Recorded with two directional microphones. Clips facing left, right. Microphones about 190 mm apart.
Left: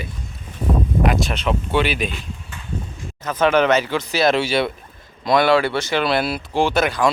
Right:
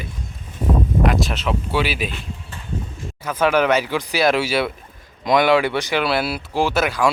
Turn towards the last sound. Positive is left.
turn(degrees=-5)  # may be behind; listen again after turning